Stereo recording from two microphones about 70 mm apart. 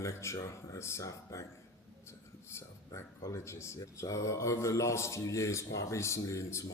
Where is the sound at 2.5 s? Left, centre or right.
Left.